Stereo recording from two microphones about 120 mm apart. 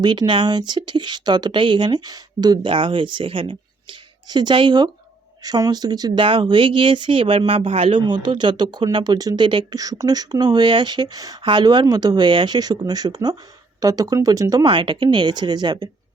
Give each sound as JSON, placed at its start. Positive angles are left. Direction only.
{"t": 0.0, "sound": "speech", "side_deg": -40}
{"t": 14.6, "sound": "speech", "side_deg": -40}